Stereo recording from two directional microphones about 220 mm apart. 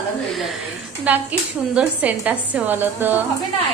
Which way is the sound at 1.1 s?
5° right (ahead or behind).